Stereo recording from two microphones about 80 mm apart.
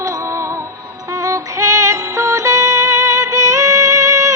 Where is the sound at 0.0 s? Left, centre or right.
Right.